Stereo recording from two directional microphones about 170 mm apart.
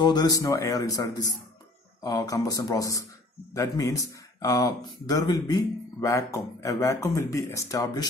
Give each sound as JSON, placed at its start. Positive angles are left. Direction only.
{"t": 0.0, "sound": "speech", "side_deg": 25}